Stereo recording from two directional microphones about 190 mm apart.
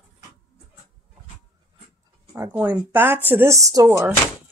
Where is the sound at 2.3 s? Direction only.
10° right (ahead or behind).